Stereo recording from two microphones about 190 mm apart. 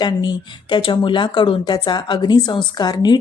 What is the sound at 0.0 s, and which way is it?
A woman's voice, 20° left (ahead or behind).